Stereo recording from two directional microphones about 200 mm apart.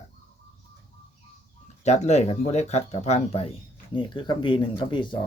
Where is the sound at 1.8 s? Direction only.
35° left (ahead or behind).